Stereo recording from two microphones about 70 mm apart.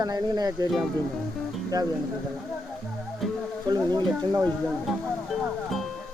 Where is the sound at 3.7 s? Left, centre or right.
Right.